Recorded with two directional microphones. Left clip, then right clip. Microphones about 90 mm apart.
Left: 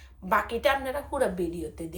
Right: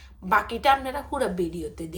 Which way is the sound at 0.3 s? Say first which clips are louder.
Right 4 dB; 20° right (ahead or behind).